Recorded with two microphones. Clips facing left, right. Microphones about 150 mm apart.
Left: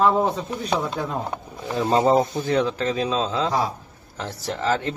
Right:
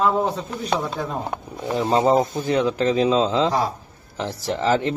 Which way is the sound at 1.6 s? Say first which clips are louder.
Right 1 dB; 20° right (ahead or behind).